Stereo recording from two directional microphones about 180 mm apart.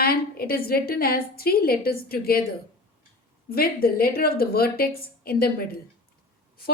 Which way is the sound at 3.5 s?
55° left (ahead or behind).